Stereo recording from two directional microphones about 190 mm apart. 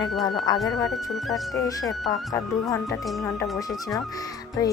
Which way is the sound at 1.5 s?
20° left (ahead or behind).